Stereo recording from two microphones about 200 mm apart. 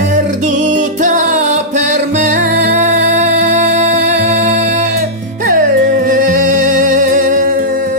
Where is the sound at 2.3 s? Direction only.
40° right (ahead or behind).